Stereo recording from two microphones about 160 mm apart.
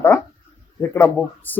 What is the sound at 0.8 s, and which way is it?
Speech, 10° left (ahead or behind).